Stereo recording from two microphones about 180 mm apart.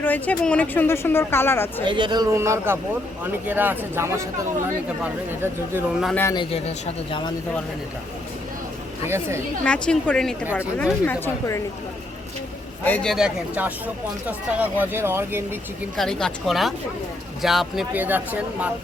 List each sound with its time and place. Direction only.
0.0 s a woman's voice: 10° left (ahead or behind)
1.8 s a man's voice: 25° right (ahead or behind)
5.3 s speech: 10° right (ahead or behind)
6.3 s speech: 30° left (ahead or behind)
9.0 s speech: 15° right (ahead or behind)
9.6 s a woman's voice: 5° left (ahead or behind)
12.8 s speech: 5° left (ahead or behind); by 15.4 s 15° right (ahead or behind)
16.0 s speech: 5° left (ahead or behind)